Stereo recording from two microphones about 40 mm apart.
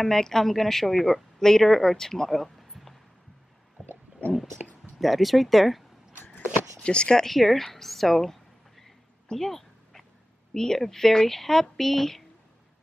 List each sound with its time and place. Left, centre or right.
0.0 s a woman's voice: centre
4.9 s speech: centre
6.8 s speech: left
7.2 s a sound: centre
10.5 s a woman's voice: centre